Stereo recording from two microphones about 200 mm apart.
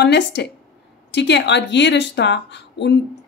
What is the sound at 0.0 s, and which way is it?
A woman's voice, 60° left (ahead or behind).